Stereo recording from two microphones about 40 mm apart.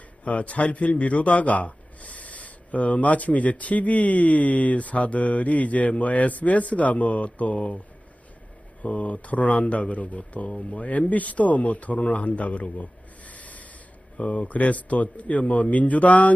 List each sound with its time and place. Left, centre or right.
0.3 s a man's voice: left
8.8 s a man's voice: left
12.1 s a sound: left
14.2 s a man's voice: left